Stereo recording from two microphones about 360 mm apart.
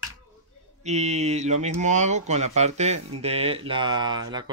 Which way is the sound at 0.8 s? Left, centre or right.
Centre.